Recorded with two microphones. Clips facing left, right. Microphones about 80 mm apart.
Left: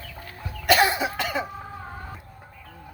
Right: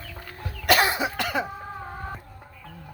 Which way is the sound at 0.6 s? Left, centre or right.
Right.